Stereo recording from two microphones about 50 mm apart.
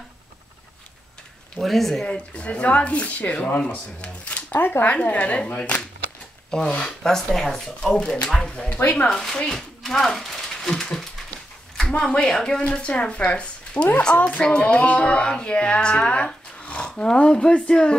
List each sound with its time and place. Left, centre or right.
1.6 s speech: centre
2.0 s speech: left
4.6 s speech: left
4.8 s speech: left
7.0 s speech: centre
8.8 s speech: left
9.1 s speech: centre
9.5 s a sound: centre
12.0 s speech: centre